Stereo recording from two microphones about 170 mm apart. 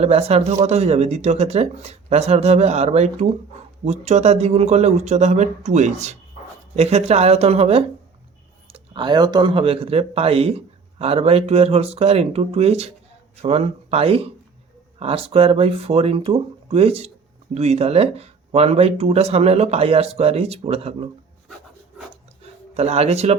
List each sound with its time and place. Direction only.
0.0 s speech: 35° right (ahead or behind)
22.7 s speech: 40° right (ahead or behind)